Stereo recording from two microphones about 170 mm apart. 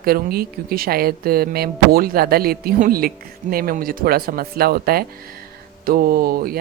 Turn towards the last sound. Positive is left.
turn(degrees=-60)  # may be behind; listen again after turning